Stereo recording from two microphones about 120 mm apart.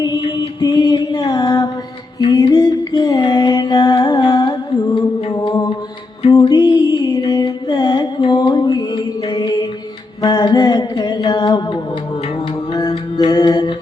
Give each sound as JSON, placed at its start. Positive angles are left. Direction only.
{"t": 0.2, "sound": "music", "side_deg": 35}
{"t": 8.3, "sound": "mantra", "side_deg": 35}
{"t": 10.2, "sound": "music", "side_deg": 35}